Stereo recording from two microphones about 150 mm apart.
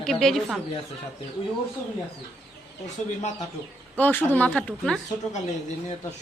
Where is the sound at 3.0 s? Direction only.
50° left (ahead or behind).